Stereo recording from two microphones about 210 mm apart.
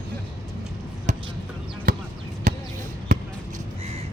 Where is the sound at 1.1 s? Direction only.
35° right (ahead or behind).